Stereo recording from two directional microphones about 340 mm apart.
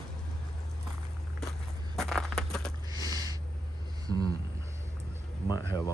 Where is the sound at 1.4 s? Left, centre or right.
Centre.